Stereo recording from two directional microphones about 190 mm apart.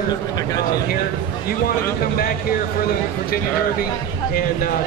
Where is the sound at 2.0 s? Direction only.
50° left (ahead or behind).